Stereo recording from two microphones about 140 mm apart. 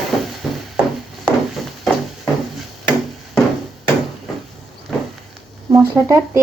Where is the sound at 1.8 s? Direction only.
Centre (ahead or behind).